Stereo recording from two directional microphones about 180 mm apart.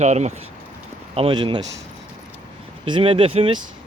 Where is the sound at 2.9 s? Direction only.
30° right (ahead or behind).